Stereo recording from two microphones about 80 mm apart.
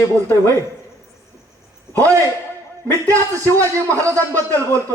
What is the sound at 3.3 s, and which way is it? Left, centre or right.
A man's voice, right.